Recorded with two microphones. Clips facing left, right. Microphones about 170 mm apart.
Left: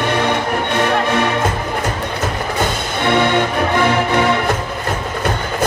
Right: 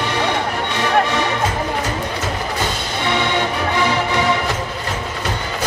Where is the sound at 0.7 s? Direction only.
55° left (ahead or behind).